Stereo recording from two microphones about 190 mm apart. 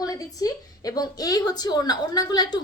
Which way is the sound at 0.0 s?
20° left (ahead or behind).